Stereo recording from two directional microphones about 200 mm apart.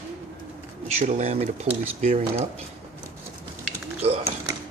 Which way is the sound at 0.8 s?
35° right (ahead or behind).